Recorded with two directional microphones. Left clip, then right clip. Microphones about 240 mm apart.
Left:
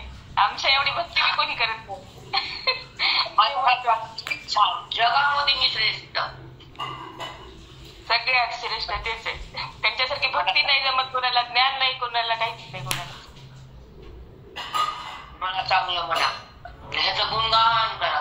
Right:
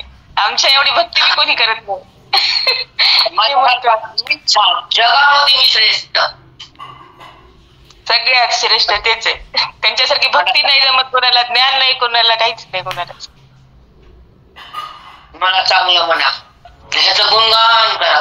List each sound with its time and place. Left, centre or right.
0.3 s a woman's voice: right
8.0 s a woman's voice: right
15.3 s a woman's voice: right